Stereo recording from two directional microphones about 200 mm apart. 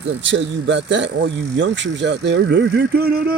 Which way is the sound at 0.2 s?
65° right (ahead or behind).